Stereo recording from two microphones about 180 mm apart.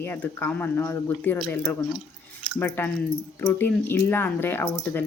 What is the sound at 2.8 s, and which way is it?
Speech, 10° left (ahead or behind).